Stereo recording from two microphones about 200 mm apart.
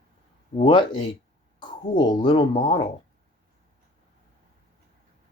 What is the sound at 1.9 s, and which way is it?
Speech, 20° left (ahead or behind).